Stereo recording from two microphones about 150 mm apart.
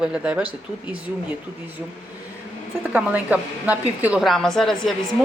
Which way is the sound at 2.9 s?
10° right (ahead or behind).